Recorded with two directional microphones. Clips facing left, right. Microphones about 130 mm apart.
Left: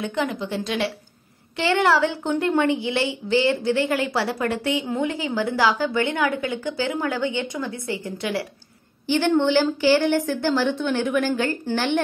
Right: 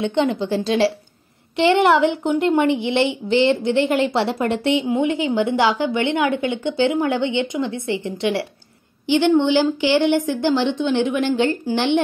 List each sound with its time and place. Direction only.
0.0 s a woman's voice: 25° right (ahead or behind)
1.6 s a woman's voice: 20° right (ahead or behind)